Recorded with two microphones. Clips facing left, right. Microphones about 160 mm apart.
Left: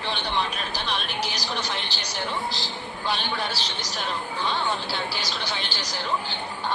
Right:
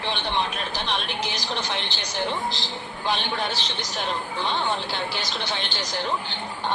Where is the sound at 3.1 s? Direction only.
20° right (ahead or behind).